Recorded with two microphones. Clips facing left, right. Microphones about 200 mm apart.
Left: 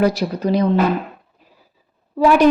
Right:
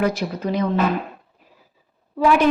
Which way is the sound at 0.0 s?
35° left (ahead or behind).